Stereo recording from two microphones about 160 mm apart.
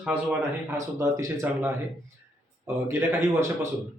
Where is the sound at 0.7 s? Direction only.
20° right (ahead or behind).